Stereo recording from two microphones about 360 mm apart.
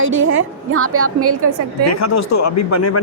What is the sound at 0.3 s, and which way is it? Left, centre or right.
Speech, right.